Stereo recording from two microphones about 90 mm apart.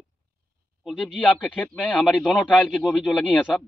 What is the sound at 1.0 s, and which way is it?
A man's voice, 5° left (ahead or behind).